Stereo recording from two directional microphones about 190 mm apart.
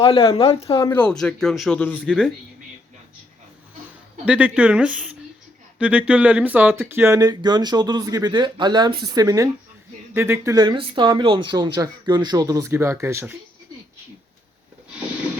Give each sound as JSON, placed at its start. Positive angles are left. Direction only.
{"t": 0.0, "sound": "speech", "side_deg": 30}
{"t": 0.9, "sound": "speech", "side_deg": 5}
{"t": 4.3, "sound": "speech", "side_deg": -5}